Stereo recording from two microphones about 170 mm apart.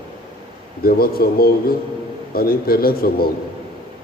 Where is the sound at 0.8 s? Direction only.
60° left (ahead or behind).